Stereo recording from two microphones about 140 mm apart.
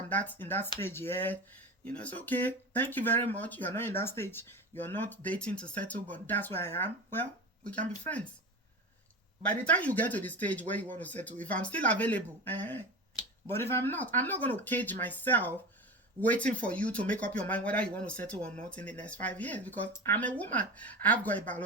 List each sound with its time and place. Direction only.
0.1 s speech: 10° left (ahead or behind)
9.6 s speech: 10° left (ahead or behind)